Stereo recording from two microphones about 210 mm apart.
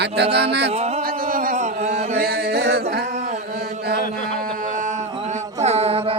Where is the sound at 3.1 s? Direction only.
35° right (ahead or behind).